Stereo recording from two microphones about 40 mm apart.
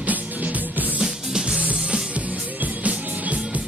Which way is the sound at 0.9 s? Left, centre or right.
Centre.